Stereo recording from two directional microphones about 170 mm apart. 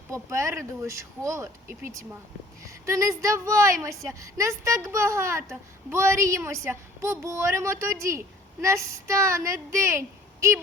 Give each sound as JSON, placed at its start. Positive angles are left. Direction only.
{"t": 0.1, "sound": "a woman's voice", "side_deg": -15}